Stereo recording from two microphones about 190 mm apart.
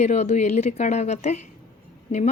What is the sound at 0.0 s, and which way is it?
Speech, 35° left (ahead or behind).